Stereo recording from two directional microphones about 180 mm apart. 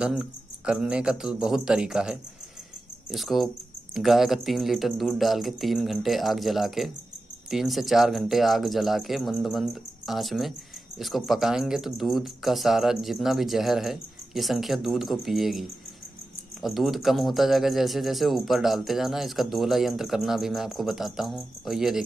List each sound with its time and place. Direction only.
0.0 s speech: 5° right (ahead or behind)